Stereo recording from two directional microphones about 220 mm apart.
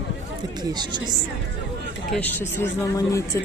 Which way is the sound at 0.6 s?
20° right (ahead or behind).